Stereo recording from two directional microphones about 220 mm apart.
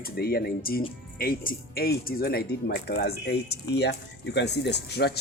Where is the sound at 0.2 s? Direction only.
45° left (ahead or behind).